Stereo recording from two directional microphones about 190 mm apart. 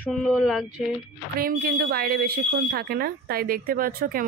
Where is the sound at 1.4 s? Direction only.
50° right (ahead or behind).